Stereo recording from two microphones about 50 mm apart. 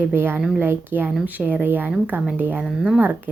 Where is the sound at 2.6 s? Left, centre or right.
Centre.